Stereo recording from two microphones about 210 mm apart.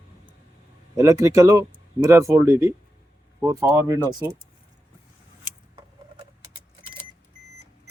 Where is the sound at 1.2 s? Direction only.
15° right (ahead or behind).